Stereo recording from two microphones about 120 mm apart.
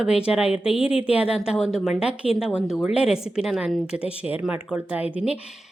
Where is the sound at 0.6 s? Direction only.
50° left (ahead or behind).